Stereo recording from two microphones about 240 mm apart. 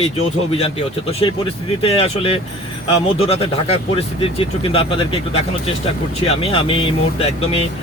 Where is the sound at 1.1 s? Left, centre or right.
Left.